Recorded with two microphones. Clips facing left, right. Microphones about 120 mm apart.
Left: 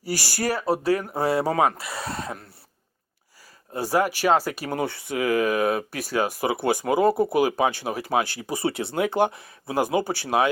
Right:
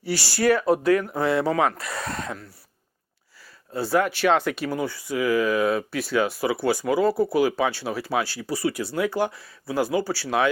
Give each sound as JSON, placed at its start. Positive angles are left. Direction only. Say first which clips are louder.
{"t": 0.0, "sound": "speech", "louder": "right 4 dB", "side_deg": 45}
{"t": 0.5, "sound": "speech", "louder": "right 2 dB", "side_deg": 35}
{"t": 3.7, "sound": "speech", "louder": "even", "side_deg": 15}
{"t": 4.3, "sound": "speech", "louder": "even", "side_deg": 35}
{"t": 4.6, "sound": "speech", "louder": "even", "side_deg": 55}
{"t": 6.7, "sound": "speech", "louder": "left 1 dB", "side_deg": 20}
{"t": 7.7, "sound": "speech", "louder": "even", "side_deg": 50}
{"t": 8.4, "sound": "speech", "louder": "even", "side_deg": 20}